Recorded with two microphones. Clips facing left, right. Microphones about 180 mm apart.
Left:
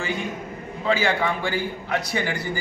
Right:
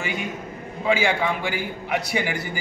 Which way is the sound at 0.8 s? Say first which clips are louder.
Right 1 dB; 10° right (ahead or behind).